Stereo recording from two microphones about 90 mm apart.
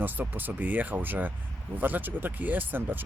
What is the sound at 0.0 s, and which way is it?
Speech, 20° right (ahead or behind).